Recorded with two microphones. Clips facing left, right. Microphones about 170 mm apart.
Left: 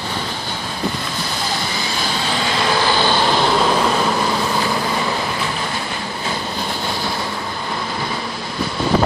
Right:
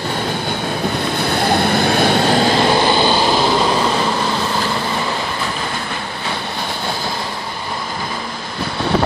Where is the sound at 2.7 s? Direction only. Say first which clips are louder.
Right 3 dB; 25° right (ahead or behind); by 4.0 s centre (ahead or behind).